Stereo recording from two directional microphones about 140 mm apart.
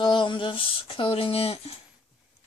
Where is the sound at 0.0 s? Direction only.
35° left (ahead or behind).